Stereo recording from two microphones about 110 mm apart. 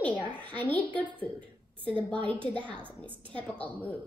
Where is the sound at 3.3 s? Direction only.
10° left (ahead or behind).